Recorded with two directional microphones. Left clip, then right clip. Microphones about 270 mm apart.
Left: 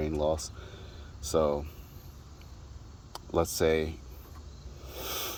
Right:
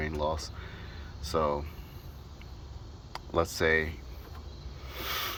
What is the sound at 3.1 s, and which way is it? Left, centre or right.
Speech, left.